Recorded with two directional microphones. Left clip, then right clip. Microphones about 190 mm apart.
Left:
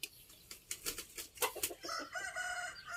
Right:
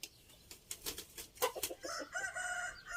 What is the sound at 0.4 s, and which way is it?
Bird flight, 40° right (ahead or behind).